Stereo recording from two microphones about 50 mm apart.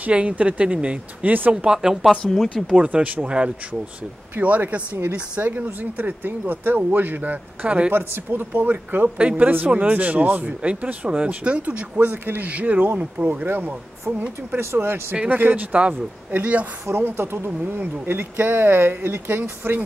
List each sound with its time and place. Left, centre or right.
0.1 s speech: right
2.6 s speech: right
4.4 s speech: right
5.5 s speech: right
7.9 s speech: right
9.2 s speech: right
14.6 s speech: right
15.2 s speech: right